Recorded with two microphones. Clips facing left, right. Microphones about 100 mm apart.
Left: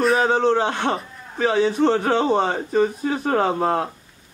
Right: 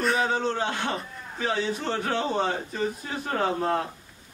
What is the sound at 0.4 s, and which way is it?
A man's voice, 75° left (ahead or behind).